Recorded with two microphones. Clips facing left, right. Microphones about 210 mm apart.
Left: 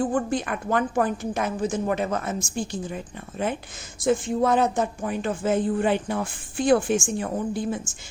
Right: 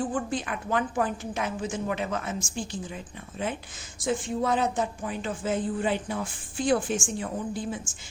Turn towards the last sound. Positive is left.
turn(degrees=60)  # may be behind; listen again after turning